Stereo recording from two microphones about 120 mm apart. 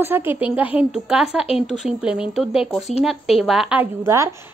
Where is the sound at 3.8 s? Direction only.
25° right (ahead or behind).